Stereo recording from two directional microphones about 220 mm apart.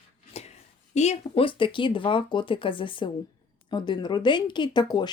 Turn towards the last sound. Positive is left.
turn(degrees=20)  # may be behind; listen again after turning